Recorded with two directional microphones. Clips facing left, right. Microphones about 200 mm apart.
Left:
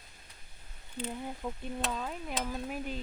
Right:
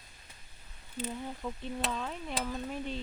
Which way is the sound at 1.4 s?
5° left (ahead or behind).